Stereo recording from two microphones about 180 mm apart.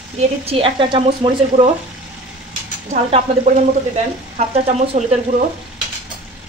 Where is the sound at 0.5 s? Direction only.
30° right (ahead or behind).